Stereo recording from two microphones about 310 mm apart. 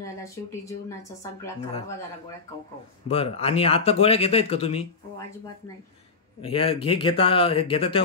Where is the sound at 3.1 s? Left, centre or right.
Centre.